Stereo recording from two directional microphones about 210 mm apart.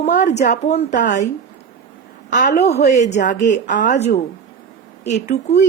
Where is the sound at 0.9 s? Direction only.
55° left (ahead or behind).